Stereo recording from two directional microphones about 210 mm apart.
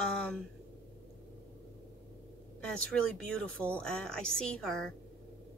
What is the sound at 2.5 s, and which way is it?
Speech, 5° left (ahead or behind).